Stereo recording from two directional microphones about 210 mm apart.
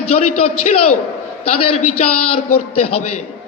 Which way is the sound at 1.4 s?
90° left.